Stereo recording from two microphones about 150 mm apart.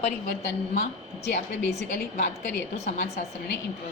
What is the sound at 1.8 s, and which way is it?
Speech, 65° left (ahead or behind).